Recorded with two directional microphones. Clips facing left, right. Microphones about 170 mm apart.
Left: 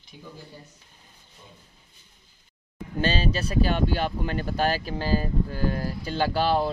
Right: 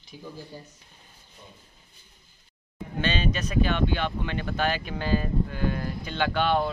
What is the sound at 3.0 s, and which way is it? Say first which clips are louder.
Speech: left 2 dB; 35° left (ahead or behind).